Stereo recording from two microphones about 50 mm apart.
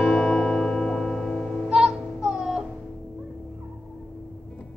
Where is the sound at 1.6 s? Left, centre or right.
Centre.